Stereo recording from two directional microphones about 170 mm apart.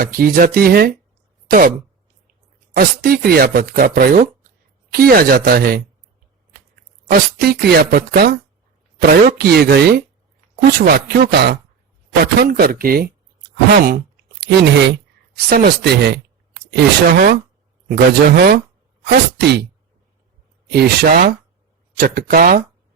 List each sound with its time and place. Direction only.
0.0 s speech: 60° right (ahead or behind)
2.7 s speech: 60° right (ahead or behind)
14.4 s speech: 90° right
15.4 s speech: 65° right (ahead or behind)
16.7 s speech: 60° right (ahead or behind)
20.7 s speech: 60° right (ahead or behind)